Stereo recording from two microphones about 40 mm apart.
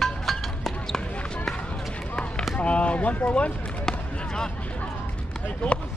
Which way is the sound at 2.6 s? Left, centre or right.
Left.